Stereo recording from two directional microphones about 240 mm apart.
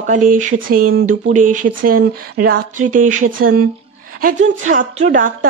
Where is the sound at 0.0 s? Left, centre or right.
Right.